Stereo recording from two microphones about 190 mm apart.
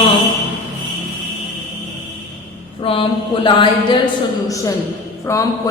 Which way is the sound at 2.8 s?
30° left (ahead or behind).